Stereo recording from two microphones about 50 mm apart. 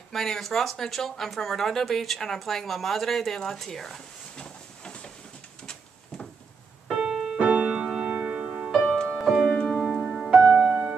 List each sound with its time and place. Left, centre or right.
0.1 s speech: centre
7.0 s keyboard: centre
7.4 s music: centre
10.5 s music: right